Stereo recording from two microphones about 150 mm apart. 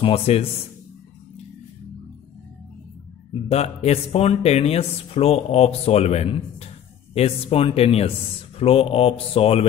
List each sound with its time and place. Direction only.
0.0 s speech: 40° left (ahead or behind)
3.3 s speech: 45° left (ahead or behind)